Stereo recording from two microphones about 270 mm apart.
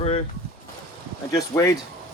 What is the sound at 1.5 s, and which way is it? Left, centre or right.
Speech, centre.